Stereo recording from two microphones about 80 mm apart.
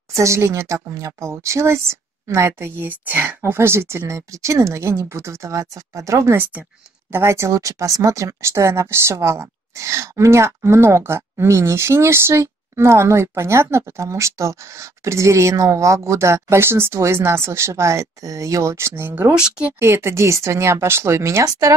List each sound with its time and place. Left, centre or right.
0.1 s speech: right
19.3 s speech: centre
19.8 s speech: right